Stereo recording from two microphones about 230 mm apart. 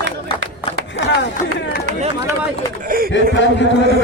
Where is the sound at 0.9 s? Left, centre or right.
Left.